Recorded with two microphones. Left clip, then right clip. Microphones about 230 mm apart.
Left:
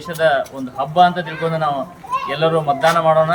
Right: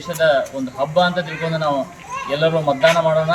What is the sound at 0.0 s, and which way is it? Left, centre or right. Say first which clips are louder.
Speech: even; left.